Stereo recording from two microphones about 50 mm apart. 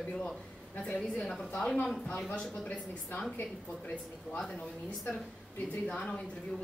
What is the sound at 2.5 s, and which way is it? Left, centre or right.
Speech, left.